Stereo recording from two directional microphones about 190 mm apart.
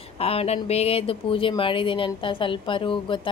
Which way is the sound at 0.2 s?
30° left (ahead or behind).